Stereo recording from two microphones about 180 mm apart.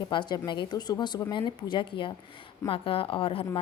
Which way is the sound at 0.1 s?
25° left (ahead or behind).